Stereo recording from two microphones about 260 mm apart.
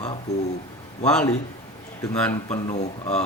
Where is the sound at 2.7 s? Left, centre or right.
Left.